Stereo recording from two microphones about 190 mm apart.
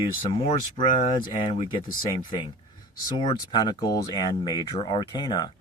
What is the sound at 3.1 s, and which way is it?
Speech, 20° left (ahead or behind).